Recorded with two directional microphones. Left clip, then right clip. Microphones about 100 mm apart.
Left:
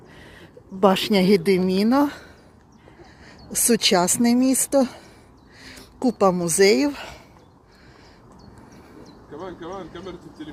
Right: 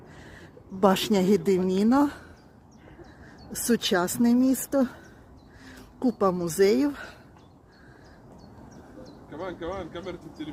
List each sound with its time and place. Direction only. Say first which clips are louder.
0.2 s a woman's voice: left 4 dB; 5° left (ahead or behind)
3.5 s speech: left 6 dB; 20° left (ahead or behind)
9.0 s speech: even; 10° left (ahead or behind)